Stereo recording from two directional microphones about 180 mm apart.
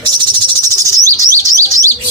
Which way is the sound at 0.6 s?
20° right (ahead or behind).